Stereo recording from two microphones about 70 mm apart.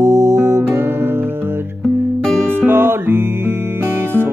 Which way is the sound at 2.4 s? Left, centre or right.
Right.